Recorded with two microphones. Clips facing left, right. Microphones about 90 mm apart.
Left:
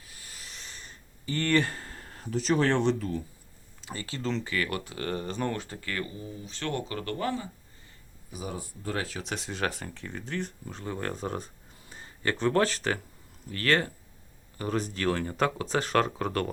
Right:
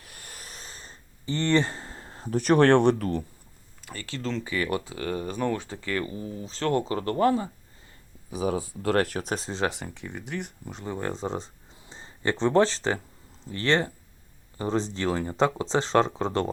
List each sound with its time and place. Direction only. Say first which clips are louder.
0.0 s a sound: right 3 dB; 55° right (ahead or behind); by 2.3 s 25° right (ahead or behind)
2.3 s speech: right 7 dB; 55° right (ahead or behind)
3.8 s speech: even; 10° left (ahead or behind)
4.4 s speech: right 3 dB; 20° right (ahead or behind)
4.9 s speech: right 2 dB; 5° right (ahead or behind)
6.4 s speech: right 8 dB; 30° right (ahead or behind)
8.8 s speech: right 9 dB; 70° right (ahead or behind); by 9.6 s 35° right (ahead or behind)
9.6 s speech: right 3 dB; 20° right (ahead or behind)